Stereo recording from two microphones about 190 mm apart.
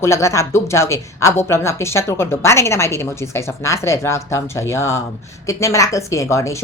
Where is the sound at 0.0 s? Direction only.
15° left (ahead or behind).